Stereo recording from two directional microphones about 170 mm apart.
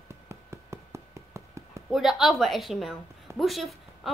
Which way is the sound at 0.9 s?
15° right (ahead or behind).